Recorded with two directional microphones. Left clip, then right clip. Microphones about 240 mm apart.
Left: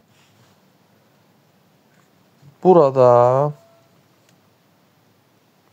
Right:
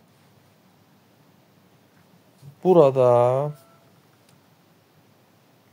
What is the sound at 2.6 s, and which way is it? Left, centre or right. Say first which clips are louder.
Speech: left 4 dB; left.